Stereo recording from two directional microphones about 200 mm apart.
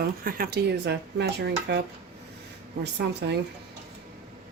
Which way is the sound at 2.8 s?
55° right (ahead or behind).